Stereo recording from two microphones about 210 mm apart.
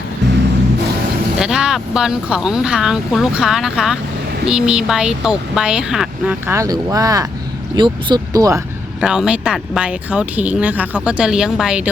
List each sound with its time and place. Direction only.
1.4 s speech: 5° right (ahead or behind)
9.0 s speech: 5° right (ahead or behind)